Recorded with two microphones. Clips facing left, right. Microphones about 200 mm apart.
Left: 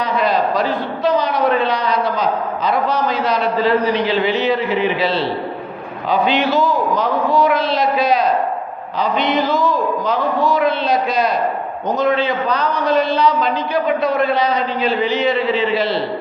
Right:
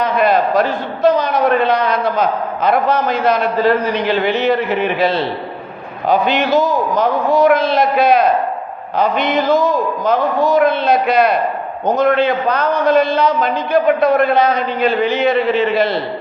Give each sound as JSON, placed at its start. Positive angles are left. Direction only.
{"t": 0.0, "sound": "a man's voice", "side_deg": -50}